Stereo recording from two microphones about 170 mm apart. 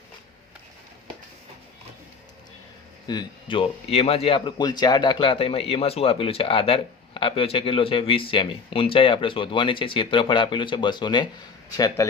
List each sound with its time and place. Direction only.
3.1 s speech: 25° left (ahead or behind)